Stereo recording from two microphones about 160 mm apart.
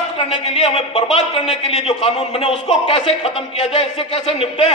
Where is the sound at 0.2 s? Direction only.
35° left (ahead or behind).